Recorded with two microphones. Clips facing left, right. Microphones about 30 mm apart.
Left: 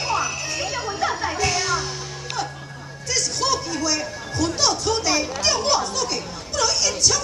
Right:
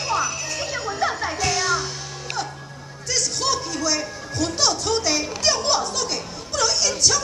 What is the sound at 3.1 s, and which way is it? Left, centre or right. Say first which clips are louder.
Music: left 1 dB; centre.